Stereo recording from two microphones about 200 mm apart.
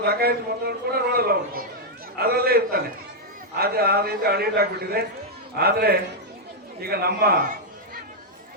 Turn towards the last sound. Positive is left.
turn(degrees=-50)  # may be behind; listen again after turning